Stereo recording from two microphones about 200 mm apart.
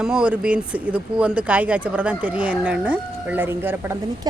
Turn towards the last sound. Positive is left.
turn(degrees=-10)  # may be behind; listen again after turning